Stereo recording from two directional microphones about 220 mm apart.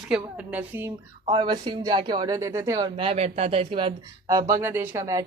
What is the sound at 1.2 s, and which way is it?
Speech, 20° right (ahead or behind).